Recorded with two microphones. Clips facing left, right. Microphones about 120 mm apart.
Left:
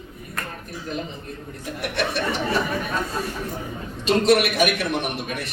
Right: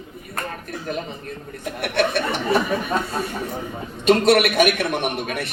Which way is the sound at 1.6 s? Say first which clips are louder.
Right 5 dB; 60° right (ahead or behind).